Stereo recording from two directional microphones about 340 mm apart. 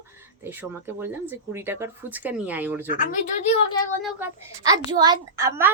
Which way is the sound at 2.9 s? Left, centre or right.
Left.